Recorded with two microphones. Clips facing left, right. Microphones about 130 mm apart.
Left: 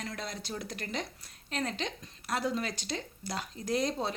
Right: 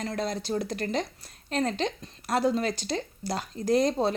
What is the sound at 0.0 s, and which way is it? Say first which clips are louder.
A woman's voice: right 9 dB; 40° right (ahead or behind).